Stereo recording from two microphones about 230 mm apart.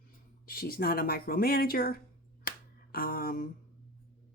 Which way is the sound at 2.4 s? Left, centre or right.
Left.